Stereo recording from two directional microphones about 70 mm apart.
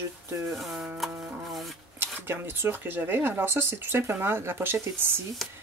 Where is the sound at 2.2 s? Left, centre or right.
Right.